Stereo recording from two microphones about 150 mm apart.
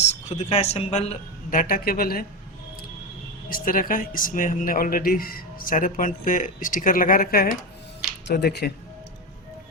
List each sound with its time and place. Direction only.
0.1 s speech: 45° left (ahead or behind)
1.5 s speech: 70° left (ahead or behind)
3.5 s speech: 65° left (ahead or behind)
8.3 s speech: 90° left